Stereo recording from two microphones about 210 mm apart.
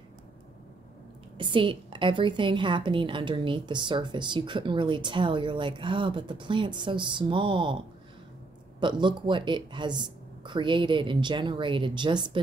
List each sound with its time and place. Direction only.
1.4 s a woman's voice: 25° right (ahead or behind)